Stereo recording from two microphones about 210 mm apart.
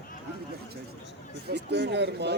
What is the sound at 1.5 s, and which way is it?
Speech, 55° right (ahead or behind).